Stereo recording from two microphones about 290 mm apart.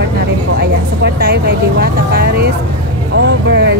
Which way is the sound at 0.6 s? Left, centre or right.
Right.